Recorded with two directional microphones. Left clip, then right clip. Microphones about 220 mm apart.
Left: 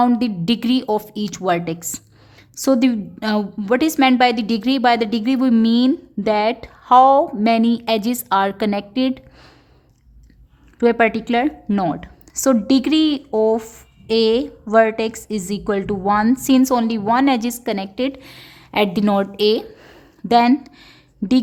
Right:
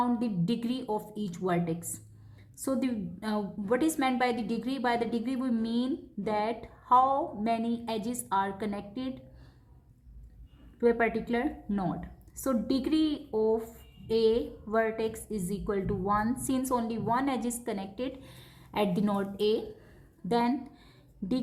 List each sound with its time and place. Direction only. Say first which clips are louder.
0.0 s a woman's voice: left 13 dB; 45° left (ahead or behind)
10.8 s a woman's voice: left 11 dB; 40° left (ahead or behind)